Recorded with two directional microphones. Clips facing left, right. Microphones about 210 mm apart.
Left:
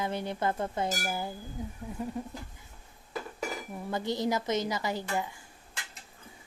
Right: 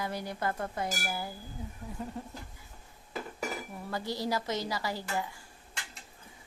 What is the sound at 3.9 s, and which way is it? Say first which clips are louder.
A woman's voice: left 3 dB; 20° left (ahead or behind).